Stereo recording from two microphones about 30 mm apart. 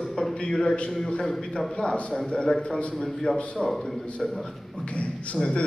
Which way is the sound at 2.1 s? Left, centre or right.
Left.